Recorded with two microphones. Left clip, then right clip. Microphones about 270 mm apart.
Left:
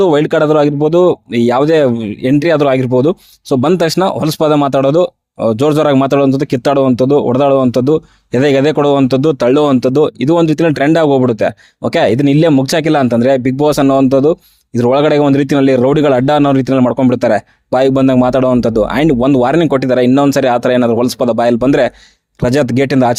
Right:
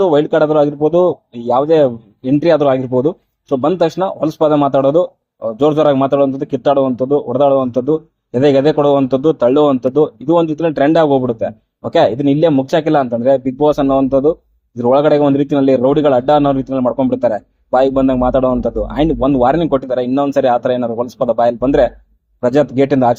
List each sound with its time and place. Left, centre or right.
0.0 s speech: left